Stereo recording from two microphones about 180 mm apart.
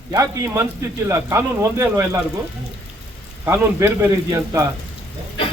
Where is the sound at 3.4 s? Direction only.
15° right (ahead or behind).